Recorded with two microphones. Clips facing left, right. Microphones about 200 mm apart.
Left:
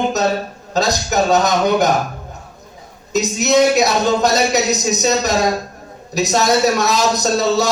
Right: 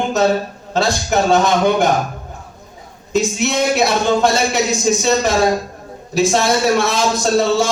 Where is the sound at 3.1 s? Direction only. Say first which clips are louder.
Left 2 dB; 40° left (ahead or behind).